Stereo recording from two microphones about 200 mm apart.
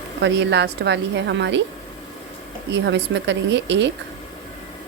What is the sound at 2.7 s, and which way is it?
A woman's voice, 60° right (ahead or behind).